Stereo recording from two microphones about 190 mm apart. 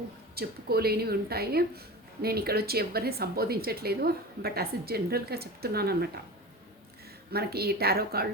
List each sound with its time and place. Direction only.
0.3 s speech: 55° right (ahead or behind)
7.3 s speech: 55° right (ahead or behind)